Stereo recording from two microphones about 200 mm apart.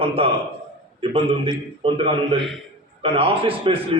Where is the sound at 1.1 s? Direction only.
25° right (ahead or behind).